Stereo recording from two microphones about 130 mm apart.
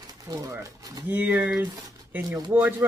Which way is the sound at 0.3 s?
25° right (ahead or behind).